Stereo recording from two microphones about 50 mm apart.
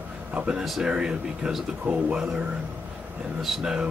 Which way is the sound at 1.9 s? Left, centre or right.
Right.